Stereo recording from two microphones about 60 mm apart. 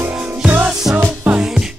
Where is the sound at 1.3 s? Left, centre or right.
Centre.